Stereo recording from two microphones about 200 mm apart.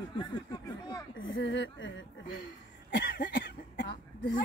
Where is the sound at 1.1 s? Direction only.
75° left (ahead or behind).